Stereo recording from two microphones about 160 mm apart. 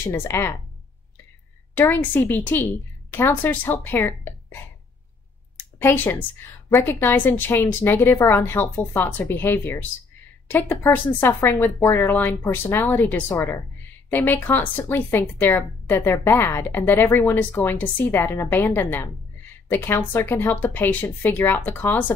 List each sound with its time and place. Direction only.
0.0 s a woman's voice: 15° left (ahead or behind)
1.8 s a woman's voice: 15° left (ahead or behind)
5.8 s a woman's voice: 10° left (ahead or behind)